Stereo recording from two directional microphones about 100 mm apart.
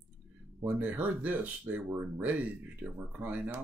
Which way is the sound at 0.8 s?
15° right (ahead or behind).